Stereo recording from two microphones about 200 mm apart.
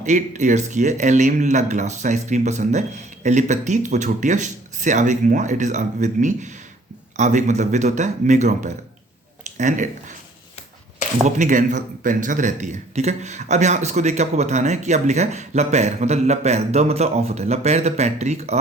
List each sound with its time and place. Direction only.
0.0 s a man's voice: 35° right (ahead or behind)
11.3 s a man's voice: 40° right (ahead or behind)